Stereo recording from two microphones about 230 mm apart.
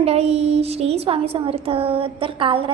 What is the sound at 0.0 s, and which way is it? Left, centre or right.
Speech, right.